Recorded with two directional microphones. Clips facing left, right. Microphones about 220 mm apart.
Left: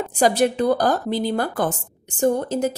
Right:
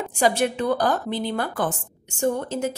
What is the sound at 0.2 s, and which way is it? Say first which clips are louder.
A woman's voice: left 3 dB; 35° left (ahead or behind).